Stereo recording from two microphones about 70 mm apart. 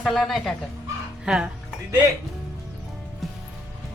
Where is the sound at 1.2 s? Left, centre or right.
Centre.